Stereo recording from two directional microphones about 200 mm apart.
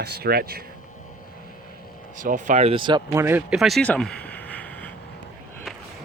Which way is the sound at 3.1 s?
10° right (ahead or behind).